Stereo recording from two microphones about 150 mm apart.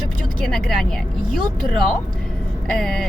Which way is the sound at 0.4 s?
Centre (ahead or behind).